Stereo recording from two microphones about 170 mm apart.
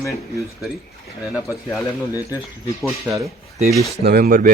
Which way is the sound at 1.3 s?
Centre (ahead or behind).